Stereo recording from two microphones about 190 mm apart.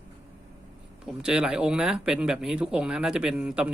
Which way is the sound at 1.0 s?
5° right (ahead or behind).